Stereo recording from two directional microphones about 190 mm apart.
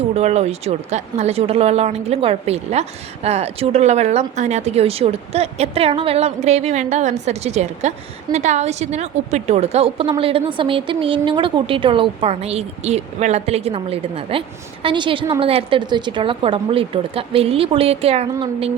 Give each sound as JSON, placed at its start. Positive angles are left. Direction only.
{"t": 0.1, "sound": "speech", "side_deg": -35}